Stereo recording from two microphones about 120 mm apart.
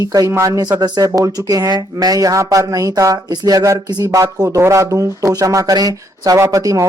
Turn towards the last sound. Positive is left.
turn(degrees=-30)  # may be behind; listen again after turning